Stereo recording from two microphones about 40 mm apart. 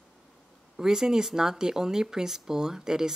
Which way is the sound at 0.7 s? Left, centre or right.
Centre.